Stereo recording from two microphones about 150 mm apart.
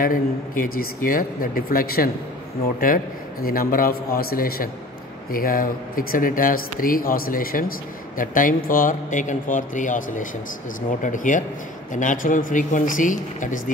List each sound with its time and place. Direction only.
0.0 s speech: 70° left (ahead or behind)
3.4 s a man's voice: 75° left (ahead or behind); by 13.6 s 60° left (ahead or behind)